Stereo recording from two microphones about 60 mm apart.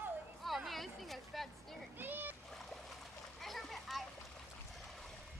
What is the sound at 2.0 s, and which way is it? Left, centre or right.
Splash, right.